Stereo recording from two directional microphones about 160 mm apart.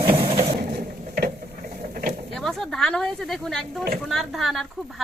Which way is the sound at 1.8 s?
60° right (ahead or behind).